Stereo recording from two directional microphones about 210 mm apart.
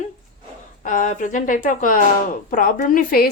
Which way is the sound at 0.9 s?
35° left (ahead or behind).